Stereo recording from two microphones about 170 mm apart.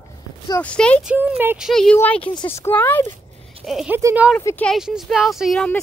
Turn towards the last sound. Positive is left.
turn(degrees=0)  # may be behind; listen again after turning